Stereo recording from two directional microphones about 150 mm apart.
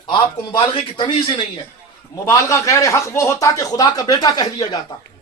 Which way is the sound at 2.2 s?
20° left (ahead or behind).